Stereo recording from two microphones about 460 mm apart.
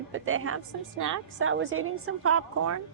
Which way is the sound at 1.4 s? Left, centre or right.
Right.